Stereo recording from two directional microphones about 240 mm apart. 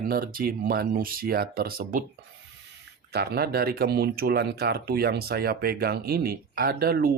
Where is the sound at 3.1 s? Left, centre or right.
Right.